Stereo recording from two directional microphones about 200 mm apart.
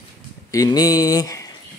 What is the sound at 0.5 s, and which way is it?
Speech, 20° left (ahead or behind).